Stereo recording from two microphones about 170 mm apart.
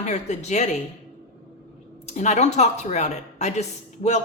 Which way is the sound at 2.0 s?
45° left (ahead or behind).